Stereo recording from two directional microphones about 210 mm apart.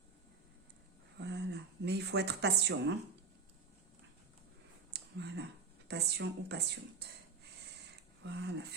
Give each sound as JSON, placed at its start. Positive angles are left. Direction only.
{"t": 1.2, "sound": "speech", "side_deg": -55}
{"t": 4.9, "sound": "a sound", "side_deg": -55}
{"t": 5.9, "sound": "a woman's voice", "side_deg": -55}
{"t": 8.2, "sound": "a woman's voice", "side_deg": -55}